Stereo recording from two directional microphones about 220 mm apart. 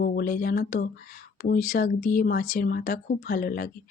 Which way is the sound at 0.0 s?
40° left (ahead or behind).